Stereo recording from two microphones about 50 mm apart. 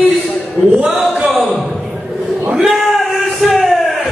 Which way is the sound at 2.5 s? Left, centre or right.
Centre.